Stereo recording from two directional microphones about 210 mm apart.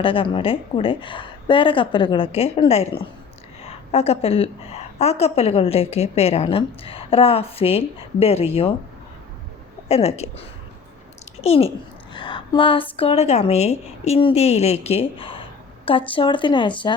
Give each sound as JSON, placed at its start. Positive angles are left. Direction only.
{"t": 0.0, "sound": "a woman's voice", "side_deg": 25}
{"t": 9.9, "sound": "a woman's voice", "side_deg": 30}